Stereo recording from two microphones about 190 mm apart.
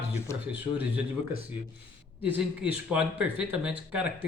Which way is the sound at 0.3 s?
15° left (ahead or behind).